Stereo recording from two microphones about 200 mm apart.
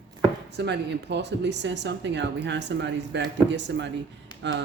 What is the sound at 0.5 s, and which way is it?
Speech, 60° right (ahead or behind).